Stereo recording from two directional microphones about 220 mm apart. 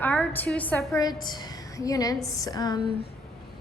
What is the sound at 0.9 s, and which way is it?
A woman's voice, 20° left (ahead or behind).